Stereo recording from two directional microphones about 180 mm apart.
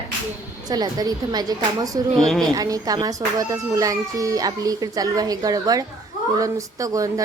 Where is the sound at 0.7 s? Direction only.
20° right (ahead or behind).